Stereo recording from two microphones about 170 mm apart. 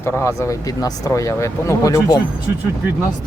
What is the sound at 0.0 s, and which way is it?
Speech, 15° left (ahead or behind).